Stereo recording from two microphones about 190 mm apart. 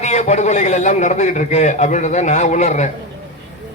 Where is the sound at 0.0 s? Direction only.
40° left (ahead or behind).